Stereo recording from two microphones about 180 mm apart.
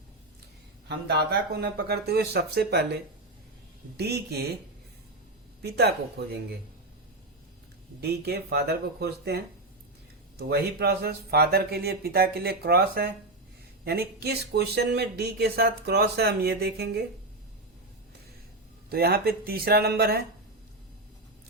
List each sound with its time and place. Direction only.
0.9 s speech: 65° right (ahead or behind)
5.6 s speech: 65° right (ahead or behind)
8.0 s speech: 60° right (ahead or behind)
18.9 s speech: 55° right (ahead or behind)